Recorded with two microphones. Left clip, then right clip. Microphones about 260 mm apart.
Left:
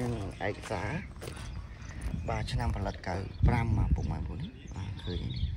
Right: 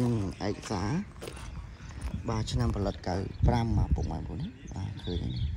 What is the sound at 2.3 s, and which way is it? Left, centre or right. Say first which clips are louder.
Speech: right 1 dB; centre.